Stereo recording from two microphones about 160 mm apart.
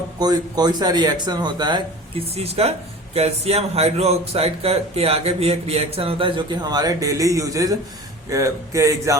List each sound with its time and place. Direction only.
0.2 s speech: 25° right (ahead or behind)